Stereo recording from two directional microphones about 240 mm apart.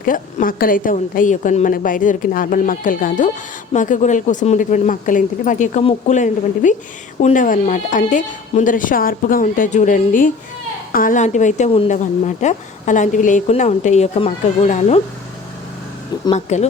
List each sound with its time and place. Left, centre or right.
0.0 s a woman's voice: left
16.2 s a woman's voice: left